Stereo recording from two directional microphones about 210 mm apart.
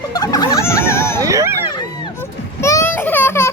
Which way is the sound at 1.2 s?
15° right (ahead or behind).